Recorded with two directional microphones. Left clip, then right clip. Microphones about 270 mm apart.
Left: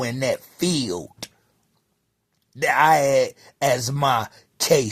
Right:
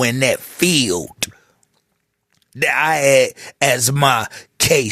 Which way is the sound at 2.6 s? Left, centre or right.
Right.